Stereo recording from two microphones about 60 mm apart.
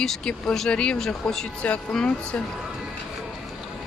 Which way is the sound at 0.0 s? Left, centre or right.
Centre.